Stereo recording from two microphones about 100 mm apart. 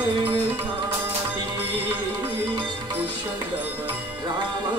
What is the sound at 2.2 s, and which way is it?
Music, 50° right (ahead or behind).